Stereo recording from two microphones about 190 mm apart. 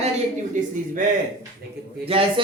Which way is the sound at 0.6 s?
40° right (ahead or behind).